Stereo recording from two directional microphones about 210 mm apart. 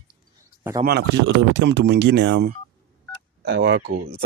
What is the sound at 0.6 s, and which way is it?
Speech, 15° right (ahead or behind).